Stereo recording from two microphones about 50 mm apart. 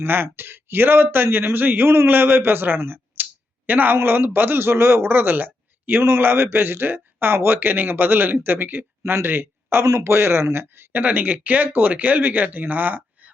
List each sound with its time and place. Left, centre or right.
0.0 s speech: right
10.9 s speech: right